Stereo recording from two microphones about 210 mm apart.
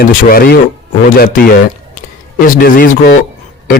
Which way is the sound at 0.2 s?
45° left (ahead or behind).